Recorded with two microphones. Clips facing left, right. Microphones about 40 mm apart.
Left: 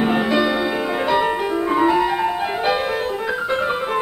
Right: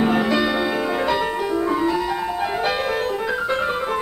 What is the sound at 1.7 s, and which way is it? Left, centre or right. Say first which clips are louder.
Music: left 4 dB; left.